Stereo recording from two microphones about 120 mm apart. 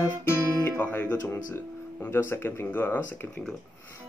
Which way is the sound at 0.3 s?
20° left (ahead or behind).